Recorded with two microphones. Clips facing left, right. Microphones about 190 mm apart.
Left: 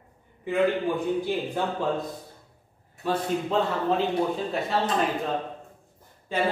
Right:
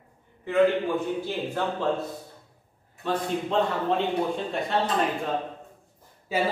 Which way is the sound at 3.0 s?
5° left (ahead or behind).